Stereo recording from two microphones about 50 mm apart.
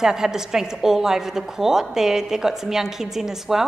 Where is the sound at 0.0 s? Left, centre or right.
Centre.